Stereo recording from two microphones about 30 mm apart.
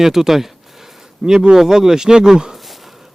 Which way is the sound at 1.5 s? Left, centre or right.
Centre.